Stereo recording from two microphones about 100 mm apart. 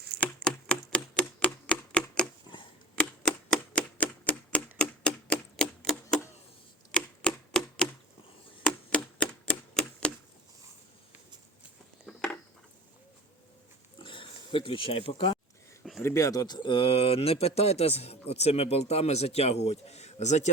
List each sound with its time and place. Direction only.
0.4 s typewriter: 10° left (ahead or behind)
12.0 s a sound: 10° left (ahead or behind)
14.0 s oink: 60° left (ahead or behind)
15.8 s a sound: centre (ahead or behind)
16.0 s speech: 30° left (ahead or behind)
16.6 s speech: 60° left (ahead or behind); by 20.1 s 90° left